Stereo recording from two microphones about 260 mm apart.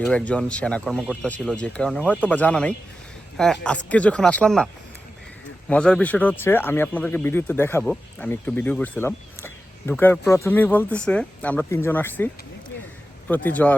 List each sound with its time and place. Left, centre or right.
0.1 s speech: centre